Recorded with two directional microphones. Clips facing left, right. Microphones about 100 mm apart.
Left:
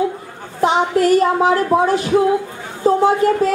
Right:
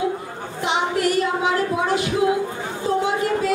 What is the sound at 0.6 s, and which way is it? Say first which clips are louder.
Speech: left 7 dB; 40° left (ahead or behind).